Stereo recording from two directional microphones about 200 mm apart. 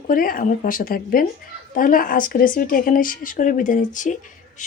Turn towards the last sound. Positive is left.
turn(degrees=40)  # may be behind; listen again after turning